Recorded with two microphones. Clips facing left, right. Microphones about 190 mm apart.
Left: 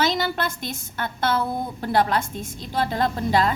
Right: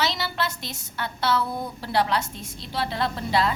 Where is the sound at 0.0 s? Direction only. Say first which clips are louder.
Left 4 dB; 50° left (ahead or behind).